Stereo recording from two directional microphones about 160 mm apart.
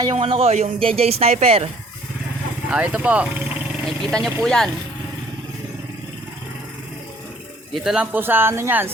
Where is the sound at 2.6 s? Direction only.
5° right (ahead or behind).